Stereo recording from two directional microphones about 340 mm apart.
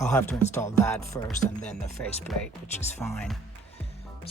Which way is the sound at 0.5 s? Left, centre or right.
Centre.